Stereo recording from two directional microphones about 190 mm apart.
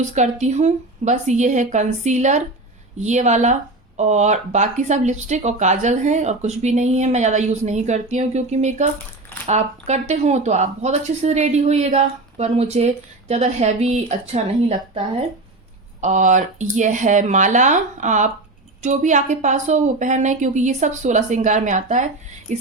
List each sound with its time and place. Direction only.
0.0 s speech: 35° right (ahead or behind)
16.0 s speech: 40° right (ahead or behind)